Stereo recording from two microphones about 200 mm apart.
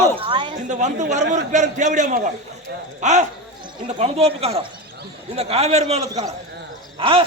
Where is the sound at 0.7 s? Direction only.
35° right (ahead or behind).